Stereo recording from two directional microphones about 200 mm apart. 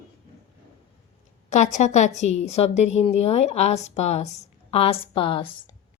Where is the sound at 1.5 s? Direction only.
35° left (ahead or behind).